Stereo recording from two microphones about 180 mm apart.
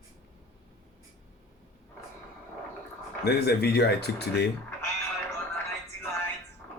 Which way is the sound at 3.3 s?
65° left (ahead or behind).